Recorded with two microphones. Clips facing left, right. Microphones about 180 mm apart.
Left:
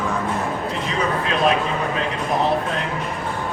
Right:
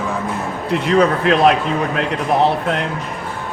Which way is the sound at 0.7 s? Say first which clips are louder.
Right 13 dB; 70° right (ahead or behind).